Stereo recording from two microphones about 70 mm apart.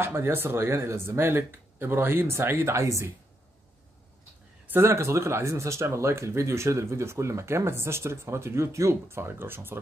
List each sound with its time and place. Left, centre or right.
0.0 s speech: right
4.6 s speech: right